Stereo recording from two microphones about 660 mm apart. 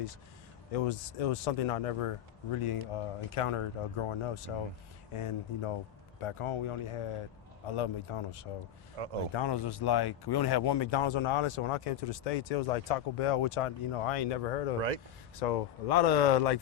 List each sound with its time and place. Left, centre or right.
0.7 s speech: left
9.0 s speech: right
9.3 s speech: left
14.8 s speech: right
15.4 s speech: left